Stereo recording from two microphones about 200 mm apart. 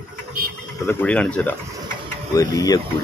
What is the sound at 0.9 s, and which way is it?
Speech, 5° left (ahead or behind).